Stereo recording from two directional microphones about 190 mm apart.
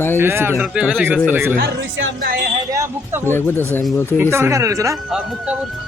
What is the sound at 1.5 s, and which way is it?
Speech, 65° right (ahead or behind).